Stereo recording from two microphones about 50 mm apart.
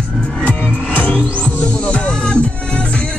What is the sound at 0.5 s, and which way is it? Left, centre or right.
Music, left.